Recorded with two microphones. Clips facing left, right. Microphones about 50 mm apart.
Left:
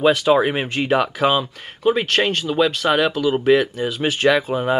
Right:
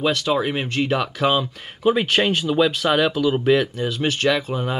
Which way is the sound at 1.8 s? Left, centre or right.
Centre.